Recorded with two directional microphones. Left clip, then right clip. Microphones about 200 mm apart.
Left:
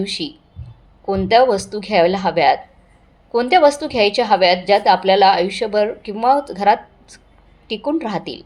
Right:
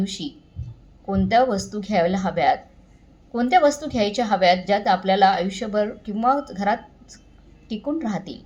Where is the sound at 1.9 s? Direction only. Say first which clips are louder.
Left 6 dB; 90° left.